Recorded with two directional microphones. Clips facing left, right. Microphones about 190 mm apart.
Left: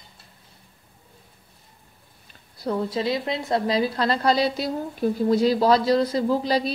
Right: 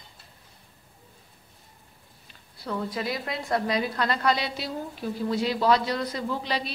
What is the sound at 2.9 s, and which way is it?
A woman's voice, 25° left (ahead or behind).